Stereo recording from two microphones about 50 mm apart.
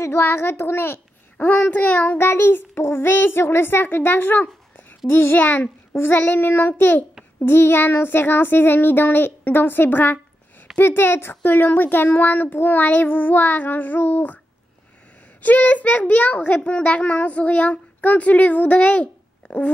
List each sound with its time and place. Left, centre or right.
0.0 s child singing: left
1.4 s speech: left
2.1 s child singing: left
4.4 s a sound: left
5.0 s child singing: left
5.4 s speech: left
7.3 s child singing: left
10.8 s speech: left
15.4 s a child's voice: left